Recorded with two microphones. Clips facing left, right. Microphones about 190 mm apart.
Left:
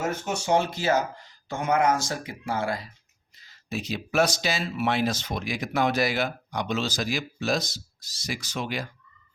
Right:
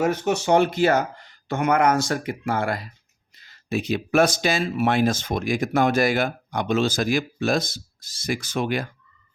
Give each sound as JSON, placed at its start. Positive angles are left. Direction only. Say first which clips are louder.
{"t": 0.1, "sound": "speech", "louder": "right 5 dB", "side_deg": -60}